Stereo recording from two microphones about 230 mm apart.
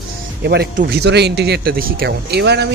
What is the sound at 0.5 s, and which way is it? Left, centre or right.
Speech, right.